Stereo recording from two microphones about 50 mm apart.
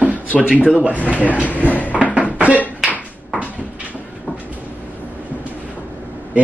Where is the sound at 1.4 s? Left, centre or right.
Left.